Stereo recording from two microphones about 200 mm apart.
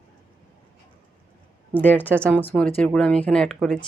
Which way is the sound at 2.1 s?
10° right (ahead or behind).